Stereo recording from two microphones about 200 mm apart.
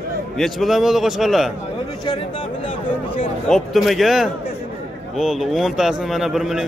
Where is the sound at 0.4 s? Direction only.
Centre (ahead or behind).